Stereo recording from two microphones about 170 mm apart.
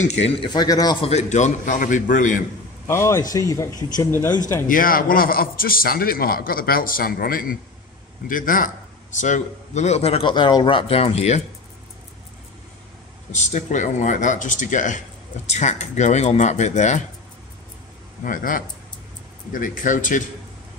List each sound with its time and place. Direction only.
0.4 s speech: 25° left (ahead or behind)
1.0 s speech: 40° left (ahead or behind)
2.9 s speech: 15° left (ahead or behind)
4.6 s a man's voice: 55° left (ahead or behind); by 11.4 s 40° left (ahead or behind)
13.3 s speech: 45° left (ahead or behind)
18.2 s speech: 55° left (ahead or behind)